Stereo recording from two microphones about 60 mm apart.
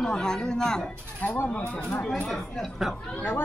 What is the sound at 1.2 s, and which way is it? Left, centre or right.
Speech, left.